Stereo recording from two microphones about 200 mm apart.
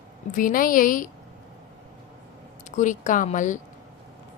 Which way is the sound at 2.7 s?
40° left (ahead or behind).